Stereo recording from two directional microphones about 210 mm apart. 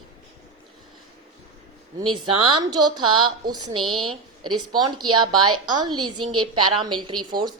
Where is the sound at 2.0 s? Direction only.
20° right (ahead or behind).